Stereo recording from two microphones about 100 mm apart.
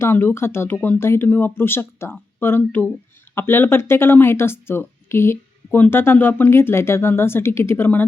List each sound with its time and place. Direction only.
0.0 s speech: 20° left (ahead or behind)